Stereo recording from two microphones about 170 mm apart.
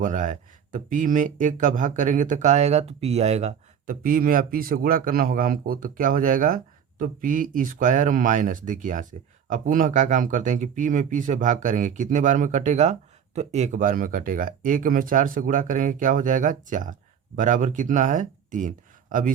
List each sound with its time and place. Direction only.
0.0 s speech: 50° right (ahead or behind)
4.0 s a man's voice: 55° right (ahead or behind)